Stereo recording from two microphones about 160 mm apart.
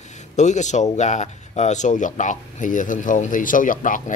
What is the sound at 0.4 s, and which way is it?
Speech, 45° left (ahead or behind).